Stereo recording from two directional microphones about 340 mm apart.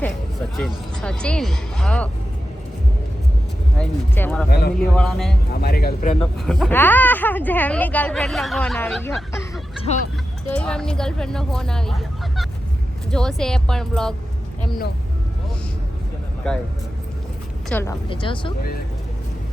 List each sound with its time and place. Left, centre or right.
0.5 s speech: centre
3.8 s speech: centre
4.4 s speech: left
4.9 s speech: centre
5.5 s speech: left
6.4 s speech: centre
16.4 s speech: centre
17.7 s speech: centre